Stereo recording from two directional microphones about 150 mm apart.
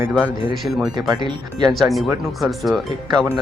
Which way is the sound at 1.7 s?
Centre (ahead or behind).